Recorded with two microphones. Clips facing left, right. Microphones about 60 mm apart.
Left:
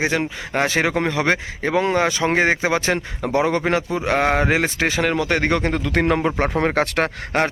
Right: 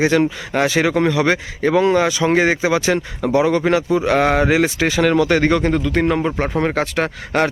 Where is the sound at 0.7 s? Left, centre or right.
Left.